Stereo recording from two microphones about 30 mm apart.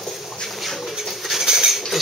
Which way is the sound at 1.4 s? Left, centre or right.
Centre.